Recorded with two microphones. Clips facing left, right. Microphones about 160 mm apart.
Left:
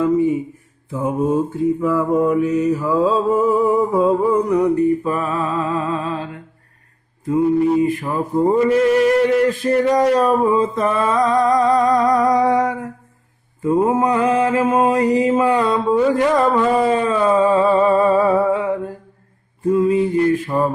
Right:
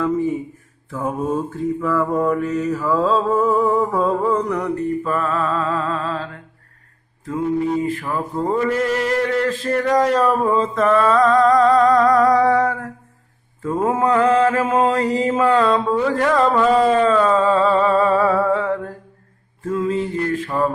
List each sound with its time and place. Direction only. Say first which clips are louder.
0.9 s mantra: left 4 dB; 10° left (ahead or behind)
7.8 s mantra: left 4 dB; 15° left (ahead or behind)
10.5 s music: right 1 dB; 15° left (ahead or behind)
13.6 s mantra: left 3 dB; 10° left (ahead or behind)
19.9 s mantra: left 6 dB; 15° left (ahead or behind)